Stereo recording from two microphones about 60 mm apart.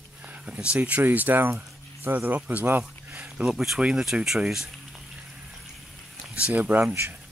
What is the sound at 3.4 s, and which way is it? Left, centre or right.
Speech, centre.